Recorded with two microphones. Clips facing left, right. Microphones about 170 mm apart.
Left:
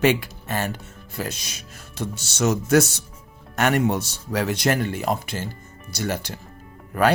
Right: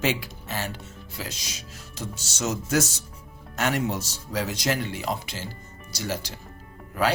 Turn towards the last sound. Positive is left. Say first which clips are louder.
# left 5 dB
turn(degrees=55)  # may be behind; listen again after turning